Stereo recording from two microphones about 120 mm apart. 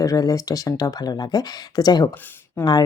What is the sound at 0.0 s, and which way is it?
Speech, 30° left (ahead or behind).